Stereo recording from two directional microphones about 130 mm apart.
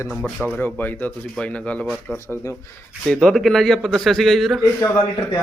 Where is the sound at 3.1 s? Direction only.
5° left (ahead or behind).